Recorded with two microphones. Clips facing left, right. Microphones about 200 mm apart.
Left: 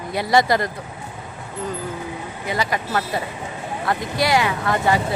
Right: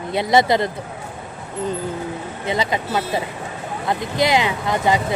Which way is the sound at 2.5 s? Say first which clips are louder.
Right 2 dB; 25° right (ahead or behind).